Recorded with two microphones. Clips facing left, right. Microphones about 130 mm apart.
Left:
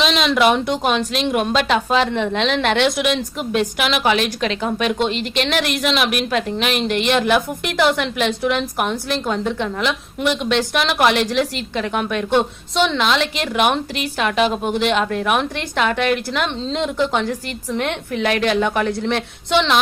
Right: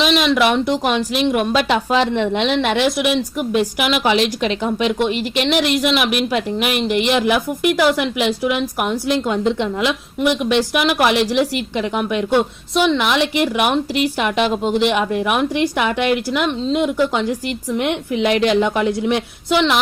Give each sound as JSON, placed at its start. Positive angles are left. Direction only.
{"t": 0.0, "sound": "speech", "side_deg": 0}
{"t": 2.0, "sound": "a woman's voice", "side_deg": -15}
{"t": 4.1, "sound": "a woman's voice", "side_deg": -20}
{"t": 10.2, "sound": "a woman's voice", "side_deg": -5}